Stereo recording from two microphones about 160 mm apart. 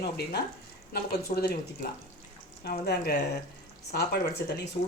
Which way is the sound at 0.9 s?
75° left (ahead or behind).